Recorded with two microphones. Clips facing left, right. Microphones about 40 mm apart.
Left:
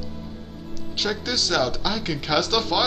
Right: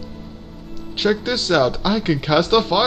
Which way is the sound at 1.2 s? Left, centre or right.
Right.